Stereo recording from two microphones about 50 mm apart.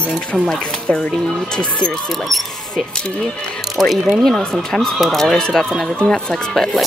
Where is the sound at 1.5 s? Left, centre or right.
Centre.